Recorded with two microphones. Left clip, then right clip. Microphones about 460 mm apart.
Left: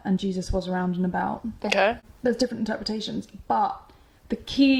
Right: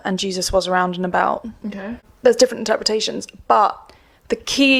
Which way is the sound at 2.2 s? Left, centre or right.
Right.